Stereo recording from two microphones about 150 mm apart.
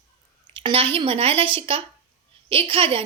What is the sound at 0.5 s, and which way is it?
A woman's voice, 35° right (ahead or behind).